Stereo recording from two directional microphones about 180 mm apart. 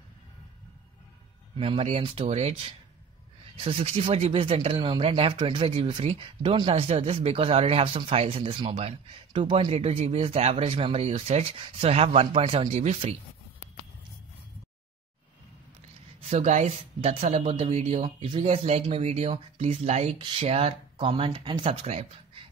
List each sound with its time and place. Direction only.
1.6 s speech: 35° right (ahead or behind)
16.3 s speech: 40° right (ahead or behind)